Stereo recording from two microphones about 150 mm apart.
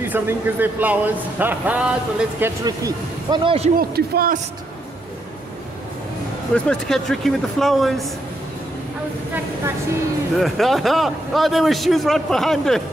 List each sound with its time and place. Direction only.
0.1 s speech: 10° right (ahead or behind)
2.6 s speech: 25° right (ahead or behind)
3.7 s a man's voice: 85° right
6.5 s a man's voice: 5° left (ahead or behind)
10.3 s a man's voice: centre (ahead or behind)